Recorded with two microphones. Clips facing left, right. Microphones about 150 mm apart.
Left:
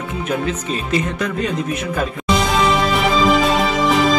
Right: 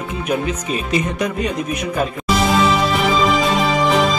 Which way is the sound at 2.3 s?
Centre (ahead or behind).